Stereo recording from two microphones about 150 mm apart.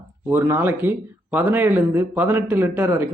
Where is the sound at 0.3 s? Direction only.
15° right (ahead or behind).